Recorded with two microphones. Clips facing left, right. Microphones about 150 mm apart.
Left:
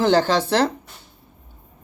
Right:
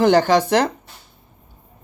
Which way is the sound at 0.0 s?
15° right (ahead or behind).